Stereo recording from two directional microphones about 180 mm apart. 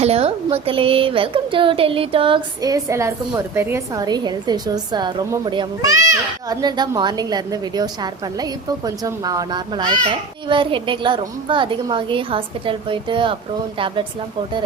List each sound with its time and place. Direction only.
0.0 s a woman's voice: 35° right (ahead or behind)
9.0 s a woman's voice: 20° right (ahead or behind)